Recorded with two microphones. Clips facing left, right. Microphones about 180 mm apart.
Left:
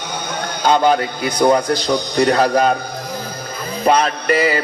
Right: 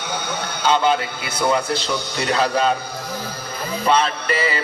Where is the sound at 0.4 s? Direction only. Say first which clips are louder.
Left 4 dB; 35° left (ahead or behind).